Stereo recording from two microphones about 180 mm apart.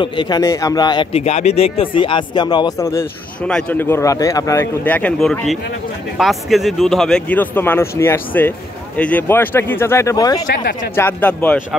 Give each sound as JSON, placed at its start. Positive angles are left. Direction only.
{"t": 0.0, "sound": "speech", "side_deg": 25}
{"t": 1.1, "sound": "speech", "side_deg": 35}
{"t": 3.4, "sound": "speech", "side_deg": 5}
{"t": 10.4, "sound": "speech", "side_deg": 50}
{"t": 11.0, "sound": "speech", "side_deg": 10}